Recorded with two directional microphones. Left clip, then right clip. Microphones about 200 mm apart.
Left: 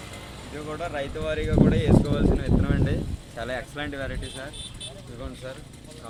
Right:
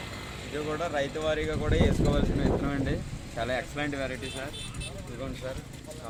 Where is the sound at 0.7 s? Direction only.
10° right (ahead or behind).